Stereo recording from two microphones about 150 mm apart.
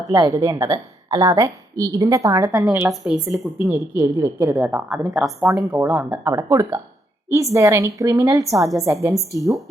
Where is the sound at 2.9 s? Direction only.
Centre (ahead or behind).